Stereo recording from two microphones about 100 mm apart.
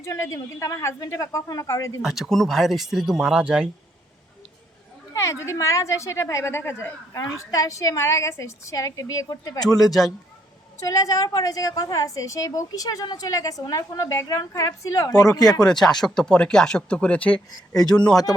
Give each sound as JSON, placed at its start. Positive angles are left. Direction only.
{"t": 0.0, "sound": "a woman's voice", "side_deg": 30}
{"t": 2.0, "sound": "speech", "side_deg": -5}
{"t": 5.1, "sound": "a woman's voice", "side_deg": 30}
{"t": 9.6, "sound": "speech", "side_deg": 0}
{"t": 10.8, "sound": "a woman's voice", "side_deg": 35}
{"t": 15.6, "sound": "speech", "side_deg": 5}